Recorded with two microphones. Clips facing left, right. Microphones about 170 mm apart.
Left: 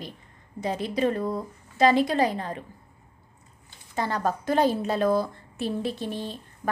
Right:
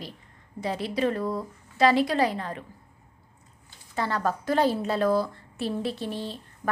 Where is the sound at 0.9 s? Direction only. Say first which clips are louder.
Left 1 dB; 20° left (ahead or behind).